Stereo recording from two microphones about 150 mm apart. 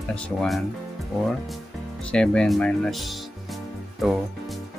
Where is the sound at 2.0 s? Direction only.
5° left (ahead or behind).